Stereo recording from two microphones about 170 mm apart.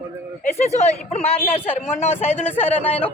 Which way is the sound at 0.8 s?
40° left (ahead or behind).